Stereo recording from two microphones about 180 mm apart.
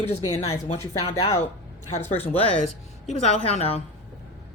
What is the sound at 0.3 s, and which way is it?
Speech, 15° left (ahead or behind).